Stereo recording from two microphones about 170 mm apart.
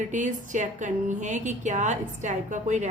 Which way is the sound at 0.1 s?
45° right (ahead or behind).